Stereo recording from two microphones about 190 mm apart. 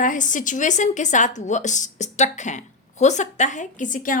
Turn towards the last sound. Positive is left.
turn(degrees=45)  # may be behind; listen again after turning